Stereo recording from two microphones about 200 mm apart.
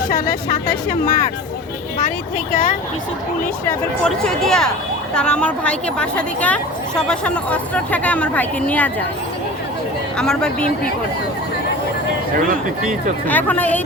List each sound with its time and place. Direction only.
0.1 s speech: 45° left (ahead or behind)
3.4 s a woman's voice: 5° left (ahead or behind)
10.2 s speech: 5° left (ahead or behind)
13.2 s a woman's voice: 10° left (ahead or behind)